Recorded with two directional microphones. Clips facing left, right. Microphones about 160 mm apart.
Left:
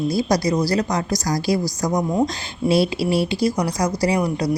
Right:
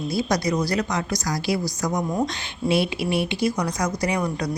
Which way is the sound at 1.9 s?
15° left (ahead or behind).